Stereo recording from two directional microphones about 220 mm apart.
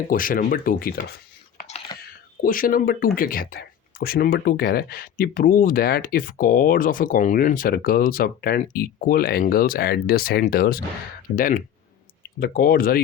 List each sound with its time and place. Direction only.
0.1 s speech: 40° left (ahead or behind)
2.0 s a sound: 40° left (ahead or behind)
3.2 s speech: 40° left (ahead or behind)